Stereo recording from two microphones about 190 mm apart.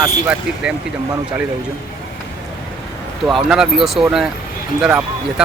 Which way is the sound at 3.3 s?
Centre (ahead or behind).